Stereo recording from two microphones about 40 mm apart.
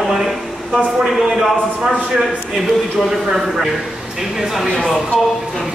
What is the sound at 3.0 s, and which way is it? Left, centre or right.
Speech, centre.